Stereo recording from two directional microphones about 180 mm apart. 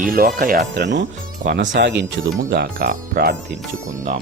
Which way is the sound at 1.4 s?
80° right.